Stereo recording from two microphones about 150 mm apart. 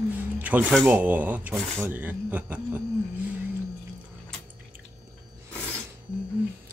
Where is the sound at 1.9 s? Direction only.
10° right (ahead or behind).